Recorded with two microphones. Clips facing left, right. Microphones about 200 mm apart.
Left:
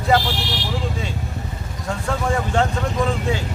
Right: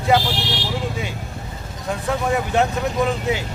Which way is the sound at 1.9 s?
15° right (ahead or behind).